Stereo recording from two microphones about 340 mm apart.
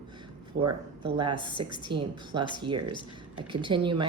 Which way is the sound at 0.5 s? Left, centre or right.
Right.